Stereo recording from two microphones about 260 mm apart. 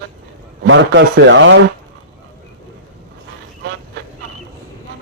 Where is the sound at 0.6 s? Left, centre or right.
Right.